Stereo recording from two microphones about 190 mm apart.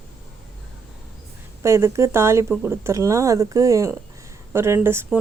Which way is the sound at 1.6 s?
15° right (ahead or behind).